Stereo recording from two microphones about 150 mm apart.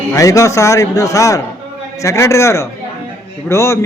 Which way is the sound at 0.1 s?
20° left (ahead or behind).